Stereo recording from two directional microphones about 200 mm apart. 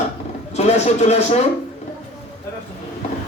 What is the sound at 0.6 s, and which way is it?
Speech, 35° left (ahead or behind).